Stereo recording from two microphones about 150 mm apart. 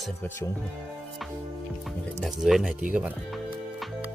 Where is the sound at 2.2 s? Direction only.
5° right (ahead or behind).